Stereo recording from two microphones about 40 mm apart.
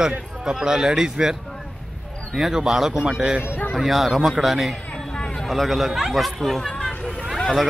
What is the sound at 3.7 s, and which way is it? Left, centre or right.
Speech, centre.